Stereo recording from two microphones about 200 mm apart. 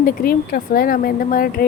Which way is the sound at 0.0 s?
45° left (ahead or behind).